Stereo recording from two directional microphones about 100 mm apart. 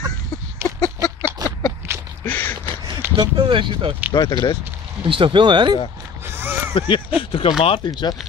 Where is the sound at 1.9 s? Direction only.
25° right (ahead or behind).